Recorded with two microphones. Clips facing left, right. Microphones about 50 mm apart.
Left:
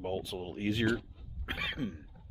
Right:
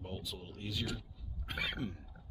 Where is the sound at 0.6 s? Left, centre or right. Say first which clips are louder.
Left 9 dB; left.